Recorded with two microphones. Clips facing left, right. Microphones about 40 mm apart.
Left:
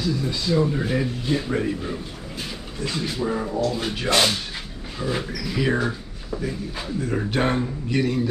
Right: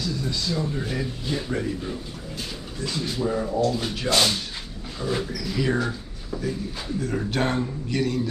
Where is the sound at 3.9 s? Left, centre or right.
Left.